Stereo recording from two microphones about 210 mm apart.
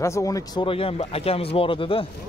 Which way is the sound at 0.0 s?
15° left (ahead or behind).